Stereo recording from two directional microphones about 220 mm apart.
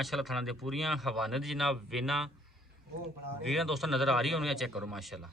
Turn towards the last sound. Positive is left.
turn(degrees=0)  # may be behind; listen again after turning